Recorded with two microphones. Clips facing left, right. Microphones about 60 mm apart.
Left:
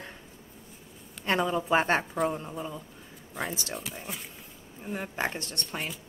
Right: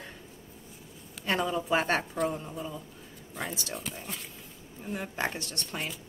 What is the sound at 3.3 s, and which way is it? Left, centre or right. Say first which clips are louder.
A woman's voice: left 2 dB; centre.